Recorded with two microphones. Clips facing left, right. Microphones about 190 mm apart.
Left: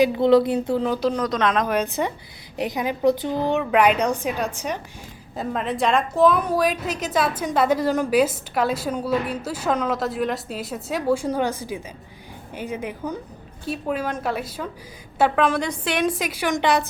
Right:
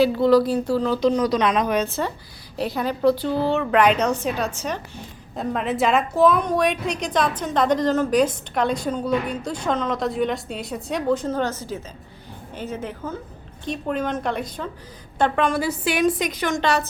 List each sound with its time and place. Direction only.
0.0 s speech: 20° left (ahead or behind)
1.1 s a woman's voice: 5° right (ahead or behind)
1.6 s a woman's voice: 10° left (ahead or behind)